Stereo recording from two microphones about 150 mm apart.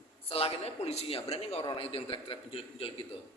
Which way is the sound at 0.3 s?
40° left (ahead or behind).